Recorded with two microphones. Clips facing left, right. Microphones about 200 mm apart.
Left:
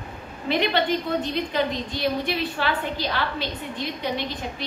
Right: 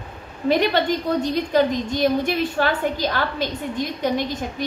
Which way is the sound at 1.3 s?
45° right (ahead or behind).